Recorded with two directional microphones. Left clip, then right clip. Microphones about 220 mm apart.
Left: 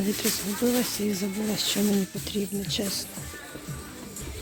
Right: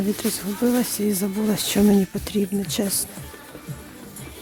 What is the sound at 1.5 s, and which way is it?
Speech, 35° right (ahead or behind).